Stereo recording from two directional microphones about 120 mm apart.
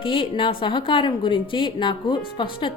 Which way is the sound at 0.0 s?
45° left (ahead or behind).